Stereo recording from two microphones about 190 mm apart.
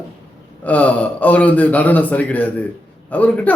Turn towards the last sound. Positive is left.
turn(degrees=10)  # may be behind; listen again after turning